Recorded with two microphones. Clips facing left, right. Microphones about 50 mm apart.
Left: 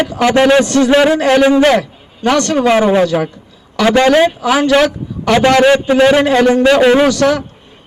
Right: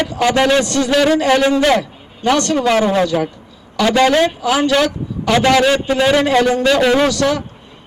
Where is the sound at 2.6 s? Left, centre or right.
Centre.